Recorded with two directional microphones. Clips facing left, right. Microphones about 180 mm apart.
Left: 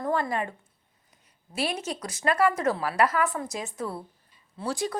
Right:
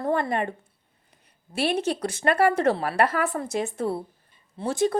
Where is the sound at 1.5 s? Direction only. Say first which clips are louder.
Right 6 dB; 60° right (ahead or behind).